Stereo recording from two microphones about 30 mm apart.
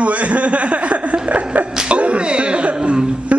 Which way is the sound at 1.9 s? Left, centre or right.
Right.